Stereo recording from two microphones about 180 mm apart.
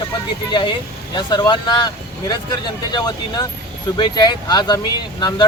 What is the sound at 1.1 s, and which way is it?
Speech, 25° left (ahead or behind).